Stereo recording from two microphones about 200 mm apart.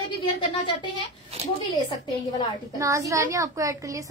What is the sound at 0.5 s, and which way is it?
Speech, 25° left (ahead or behind).